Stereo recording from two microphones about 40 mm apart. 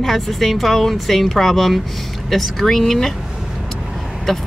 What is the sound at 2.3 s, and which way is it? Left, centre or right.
Music, centre.